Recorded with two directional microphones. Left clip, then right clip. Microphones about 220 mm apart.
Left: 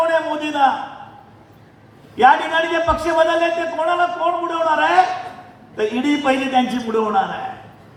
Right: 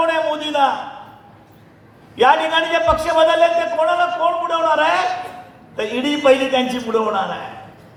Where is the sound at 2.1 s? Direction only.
35° right (ahead or behind).